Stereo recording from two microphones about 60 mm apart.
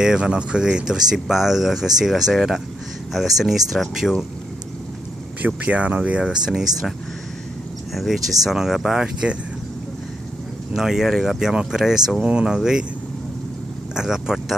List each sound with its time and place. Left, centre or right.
0.0 s speech: centre
5.4 s speech: right
7.9 s speech: centre
10.7 s speech: centre
13.9 s speech: centre